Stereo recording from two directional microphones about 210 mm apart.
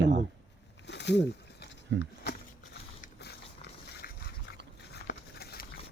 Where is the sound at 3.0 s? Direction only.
50° left (ahead or behind).